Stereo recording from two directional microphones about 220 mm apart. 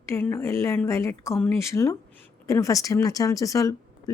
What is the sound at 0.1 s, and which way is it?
Speech, 10° left (ahead or behind).